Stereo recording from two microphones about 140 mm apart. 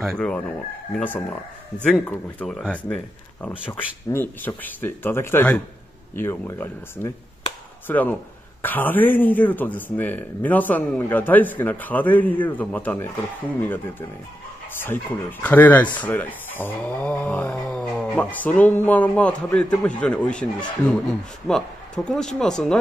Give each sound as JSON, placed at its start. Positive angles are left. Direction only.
{"t": 0.0, "sound": "speech", "side_deg": 5}
{"t": 14.8, "sound": "speech", "side_deg": 15}